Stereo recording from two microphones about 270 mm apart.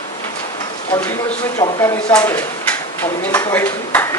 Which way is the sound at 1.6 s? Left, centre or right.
Centre.